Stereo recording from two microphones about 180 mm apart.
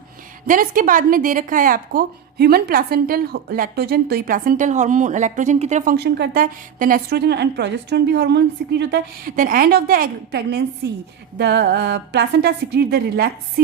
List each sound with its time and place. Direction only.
0.4 s a woman's voice: 50° right (ahead or behind); by 9.3 s 70° right (ahead or behind)
9.3 s a woman's voice: 50° right (ahead or behind)